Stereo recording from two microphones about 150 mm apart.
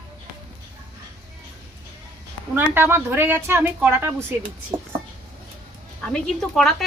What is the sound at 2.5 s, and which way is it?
Speech, 15° right (ahead or behind).